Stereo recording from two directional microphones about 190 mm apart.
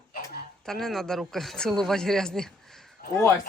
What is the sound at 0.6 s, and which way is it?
Speech, centre (ahead or behind).